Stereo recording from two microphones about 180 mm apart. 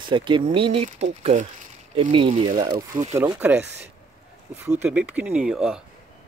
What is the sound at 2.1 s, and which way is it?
Speech, 30° right (ahead or behind).